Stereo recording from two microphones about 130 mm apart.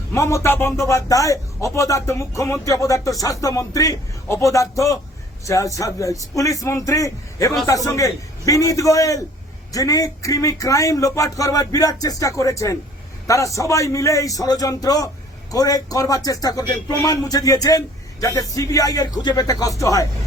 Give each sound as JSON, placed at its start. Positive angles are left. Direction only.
{"t": 0.1, "sound": "a man's voice", "side_deg": 20}